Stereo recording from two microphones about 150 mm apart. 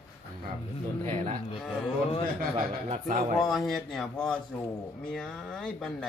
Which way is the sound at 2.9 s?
60° right (ahead or behind).